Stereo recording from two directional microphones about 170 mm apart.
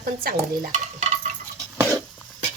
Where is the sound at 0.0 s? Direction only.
60° right (ahead or behind).